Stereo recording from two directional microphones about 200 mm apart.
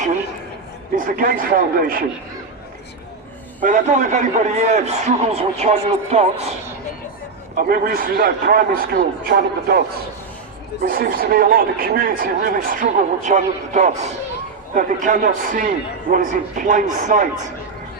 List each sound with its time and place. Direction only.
0.9 s speech: 45° right (ahead or behind)
3.6 s a man's voice: 40° right (ahead or behind)
7.5 s speech: 45° right (ahead or behind)
10.8 s a man's voice: 45° right (ahead or behind)